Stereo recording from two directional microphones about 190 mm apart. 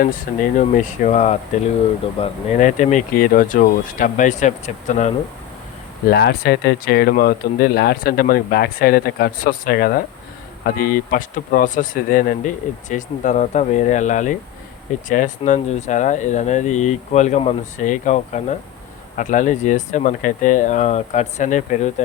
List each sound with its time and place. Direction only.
0.0 s speech: 50° left (ahead or behind)
6.1 s speech: 55° left (ahead or behind); by 22.0 s 40° left (ahead or behind)